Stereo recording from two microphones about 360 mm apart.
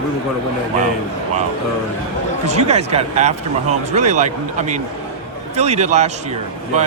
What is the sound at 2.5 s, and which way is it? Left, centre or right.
A man's voice, centre.